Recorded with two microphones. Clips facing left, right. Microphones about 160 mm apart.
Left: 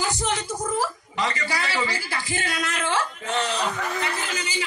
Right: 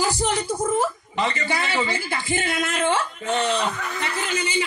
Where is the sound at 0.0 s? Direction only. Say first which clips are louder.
Right 3 dB; 35° right (ahead or behind).